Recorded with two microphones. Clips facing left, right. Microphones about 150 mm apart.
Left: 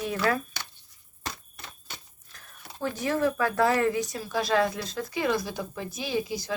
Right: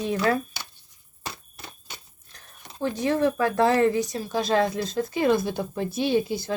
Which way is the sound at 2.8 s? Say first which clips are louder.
Right 3 dB; 25° right (ahead or behind).